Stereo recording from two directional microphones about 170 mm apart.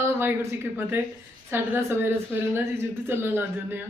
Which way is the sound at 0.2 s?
15° right (ahead or behind).